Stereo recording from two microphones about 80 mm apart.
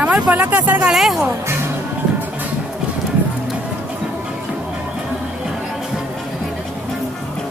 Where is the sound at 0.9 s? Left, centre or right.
Centre.